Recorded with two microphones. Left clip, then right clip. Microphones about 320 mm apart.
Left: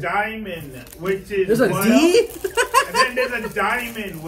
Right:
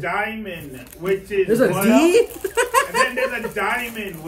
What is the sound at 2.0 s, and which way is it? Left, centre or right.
Speech, centre.